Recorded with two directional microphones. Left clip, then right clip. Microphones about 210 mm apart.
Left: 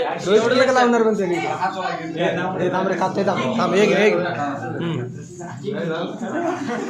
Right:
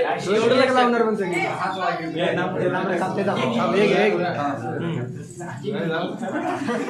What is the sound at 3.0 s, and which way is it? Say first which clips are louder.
Speech: left 2 dB; 35° left (ahead or behind).